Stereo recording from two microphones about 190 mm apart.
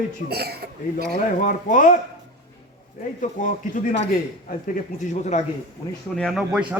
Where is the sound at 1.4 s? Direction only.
45° left (ahead or behind).